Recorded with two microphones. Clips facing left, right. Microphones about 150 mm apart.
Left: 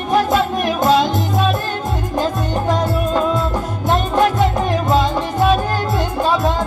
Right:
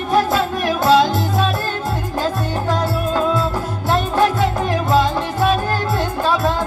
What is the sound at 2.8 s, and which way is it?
Music, 15° left (ahead or behind).